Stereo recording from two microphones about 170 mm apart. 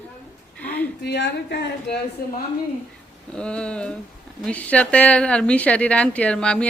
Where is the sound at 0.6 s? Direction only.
10° left (ahead or behind).